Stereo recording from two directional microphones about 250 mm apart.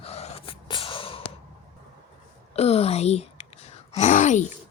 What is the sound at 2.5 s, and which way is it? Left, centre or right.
Sigh, left.